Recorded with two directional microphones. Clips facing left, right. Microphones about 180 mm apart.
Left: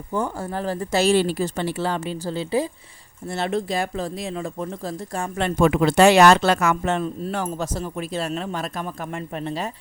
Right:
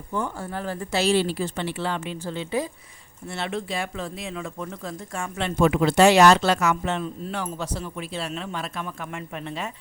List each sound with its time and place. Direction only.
0.1 s speech: 40° left (ahead or behind)
5.5 s speech: 55° left (ahead or behind); by 9.6 s 35° left (ahead or behind)